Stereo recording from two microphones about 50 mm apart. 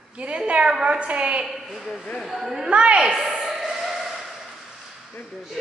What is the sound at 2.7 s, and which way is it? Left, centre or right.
Speech, right.